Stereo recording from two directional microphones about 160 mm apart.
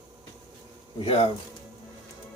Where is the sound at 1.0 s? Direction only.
35° left (ahead or behind).